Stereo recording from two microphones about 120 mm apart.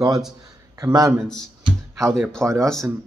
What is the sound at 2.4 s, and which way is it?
Speech, 25° right (ahead or behind).